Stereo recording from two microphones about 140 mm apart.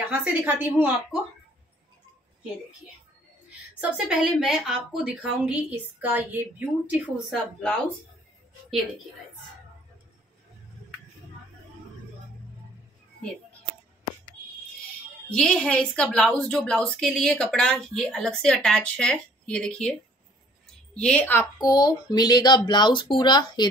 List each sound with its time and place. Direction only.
0.1 s a woman's voice: 10° right (ahead or behind)
3.8 s a woman's voice: 10° right (ahead or behind)
7.2 s speech: centre (ahead or behind)
15.2 s a woman's voice: 5° left (ahead or behind)
21.5 s speech: 25° left (ahead or behind)